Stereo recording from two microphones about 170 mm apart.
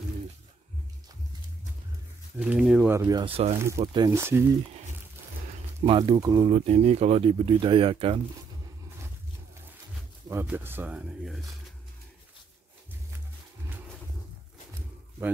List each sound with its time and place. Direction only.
2.3 s speech: 5° right (ahead or behind)
2.9 s speech: 20° right (ahead or behind)
3.3 s speech: 35° right (ahead or behind)
3.5 s speech: 15° right (ahead or behind)
3.8 s speech: 30° right (ahead or behind)
4.1 s speech: 15° right (ahead or behind)
5.9 s speech: 30° right (ahead or behind)
6.5 s speech: 40° right (ahead or behind)
10.2 s speech: 15° right (ahead or behind)